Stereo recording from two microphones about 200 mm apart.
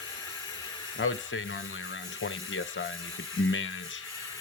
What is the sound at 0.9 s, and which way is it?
Speech, 80° left.